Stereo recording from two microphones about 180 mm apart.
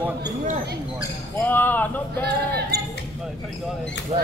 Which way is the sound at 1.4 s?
10° left (ahead or behind).